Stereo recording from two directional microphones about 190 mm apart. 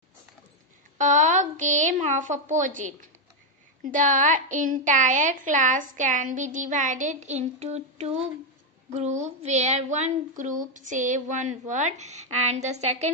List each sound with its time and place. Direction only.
0.9 s child singing: 40° right (ahead or behind)
3.8 s a woman's voice: 45° right (ahead or behind)
8.9 s child singing: 35° right (ahead or behind)